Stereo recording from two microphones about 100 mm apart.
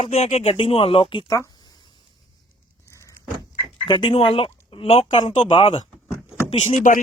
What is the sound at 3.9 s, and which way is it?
Speech, 50° left (ahead or behind).